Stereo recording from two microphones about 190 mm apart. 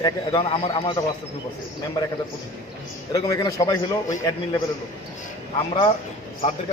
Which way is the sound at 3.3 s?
20° left (ahead or behind).